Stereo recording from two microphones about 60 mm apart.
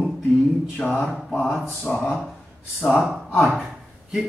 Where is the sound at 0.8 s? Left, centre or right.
Left.